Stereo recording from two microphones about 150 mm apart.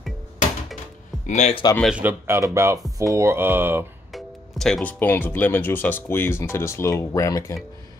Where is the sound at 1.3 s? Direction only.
50° left (ahead or behind).